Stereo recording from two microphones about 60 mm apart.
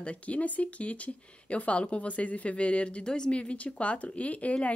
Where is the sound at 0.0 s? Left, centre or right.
Left.